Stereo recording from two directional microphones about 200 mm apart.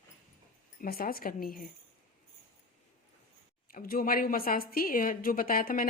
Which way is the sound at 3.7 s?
45° left (ahead or behind).